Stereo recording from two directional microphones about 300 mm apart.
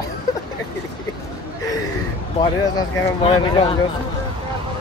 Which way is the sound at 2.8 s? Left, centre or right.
Centre.